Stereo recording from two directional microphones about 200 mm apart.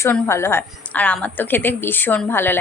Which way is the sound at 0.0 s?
15° left (ahead or behind).